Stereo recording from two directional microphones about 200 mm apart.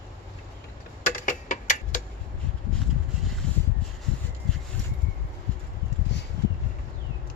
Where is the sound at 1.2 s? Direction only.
40° left (ahead or behind).